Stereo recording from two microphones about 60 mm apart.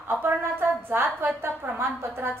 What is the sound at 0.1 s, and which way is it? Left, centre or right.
A woman's voice, right.